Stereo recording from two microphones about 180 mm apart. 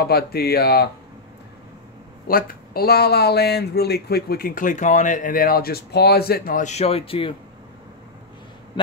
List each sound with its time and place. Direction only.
0.0 s speech: 60° left (ahead or behind)
2.2 s speech: 55° left (ahead or behind); by 7.3 s 30° left (ahead or behind)